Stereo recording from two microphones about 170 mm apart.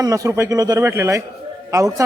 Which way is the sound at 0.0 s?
20° right (ahead or behind).